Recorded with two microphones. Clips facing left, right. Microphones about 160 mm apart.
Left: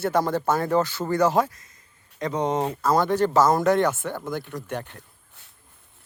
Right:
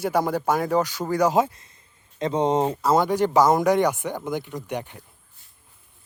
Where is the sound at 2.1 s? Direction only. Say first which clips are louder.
Right 3 dB; 25° right (ahead or behind).